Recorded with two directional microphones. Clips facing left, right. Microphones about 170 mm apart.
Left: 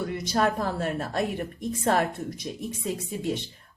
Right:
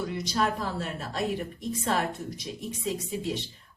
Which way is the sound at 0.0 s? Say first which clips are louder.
Left 3 dB; 50° left (ahead or behind).